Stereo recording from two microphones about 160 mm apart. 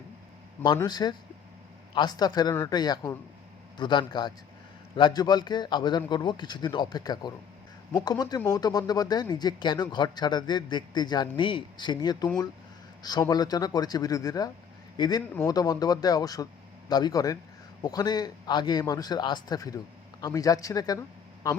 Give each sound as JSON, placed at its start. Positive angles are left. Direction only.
{"t": 0.6, "sound": "a man's voice", "side_deg": 25}